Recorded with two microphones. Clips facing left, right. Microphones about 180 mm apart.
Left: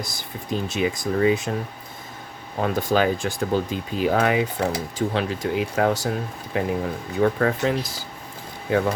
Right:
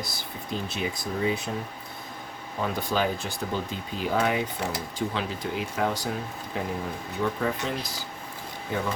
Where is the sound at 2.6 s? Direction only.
60° left (ahead or behind).